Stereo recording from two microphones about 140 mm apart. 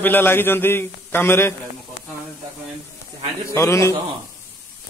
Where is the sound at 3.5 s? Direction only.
20° left (ahead or behind).